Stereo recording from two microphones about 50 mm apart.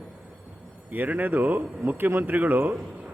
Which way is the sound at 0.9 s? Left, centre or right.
Right.